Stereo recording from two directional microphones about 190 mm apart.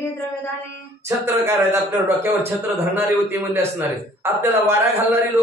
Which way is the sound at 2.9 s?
15° right (ahead or behind).